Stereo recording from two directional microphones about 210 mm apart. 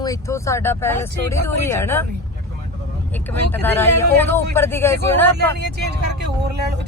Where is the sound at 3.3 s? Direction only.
10° left (ahead or behind).